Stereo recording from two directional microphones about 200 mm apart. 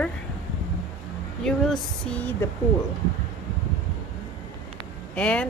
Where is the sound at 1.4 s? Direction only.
5° left (ahead or behind).